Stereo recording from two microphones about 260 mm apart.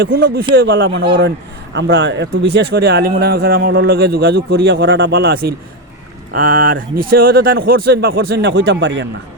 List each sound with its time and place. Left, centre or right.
0.0 s speech: right